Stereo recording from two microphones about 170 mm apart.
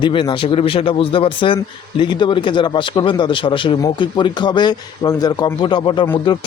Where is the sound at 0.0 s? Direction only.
30° left (ahead or behind).